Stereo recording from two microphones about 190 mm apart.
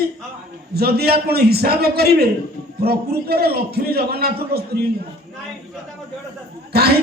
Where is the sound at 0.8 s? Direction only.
55° right (ahead or behind).